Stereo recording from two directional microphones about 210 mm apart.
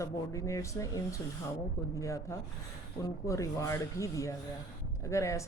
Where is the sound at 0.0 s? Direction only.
15° left (ahead or behind).